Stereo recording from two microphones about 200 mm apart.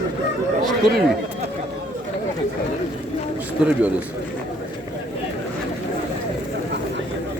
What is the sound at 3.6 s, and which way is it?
Speech, 5° right (ahead or behind).